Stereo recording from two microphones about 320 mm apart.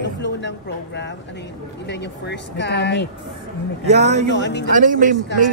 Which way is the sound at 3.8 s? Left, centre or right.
Centre.